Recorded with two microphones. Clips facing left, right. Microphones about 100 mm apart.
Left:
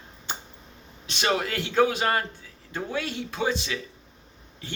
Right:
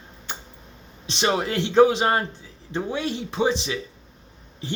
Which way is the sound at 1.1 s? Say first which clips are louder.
Right 3 dB; 25° right (ahead or behind).